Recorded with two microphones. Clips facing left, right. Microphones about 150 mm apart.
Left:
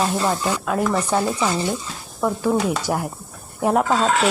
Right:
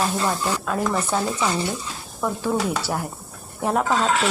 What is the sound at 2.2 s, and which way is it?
Speech, 5° left (ahead or behind).